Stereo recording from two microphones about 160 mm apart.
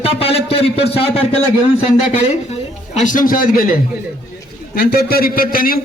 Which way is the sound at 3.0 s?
55° left (ahead or behind).